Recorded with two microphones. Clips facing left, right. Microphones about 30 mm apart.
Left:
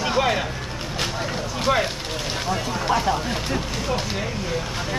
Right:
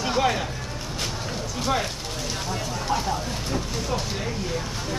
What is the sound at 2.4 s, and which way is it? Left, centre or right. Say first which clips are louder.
Speech: left 7 dB; left.